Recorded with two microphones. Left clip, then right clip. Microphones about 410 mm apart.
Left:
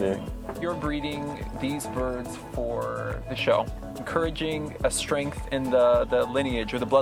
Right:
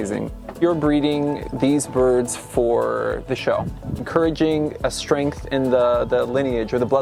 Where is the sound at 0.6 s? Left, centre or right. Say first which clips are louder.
Right 12 dB; right.